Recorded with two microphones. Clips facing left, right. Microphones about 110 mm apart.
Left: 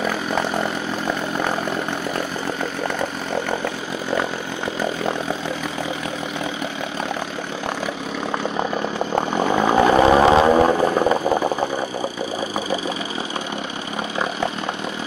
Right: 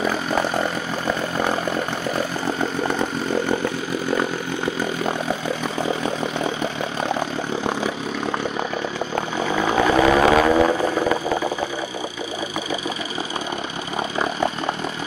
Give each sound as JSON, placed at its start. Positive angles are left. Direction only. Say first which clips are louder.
{"t": 9.6, "sound": "vehicle", "louder": "left 2 dB", "side_deg": 25}